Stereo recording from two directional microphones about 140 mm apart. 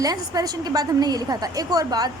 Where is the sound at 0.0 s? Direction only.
25° right (ahead or behind).